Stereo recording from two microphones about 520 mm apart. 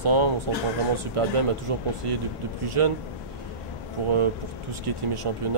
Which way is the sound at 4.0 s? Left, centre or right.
Right.